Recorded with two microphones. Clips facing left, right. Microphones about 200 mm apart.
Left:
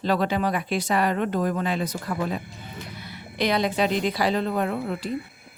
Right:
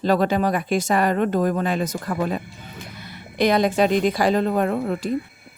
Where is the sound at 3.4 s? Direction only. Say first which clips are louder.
Right 5 dB; 45° right (ahead or behind).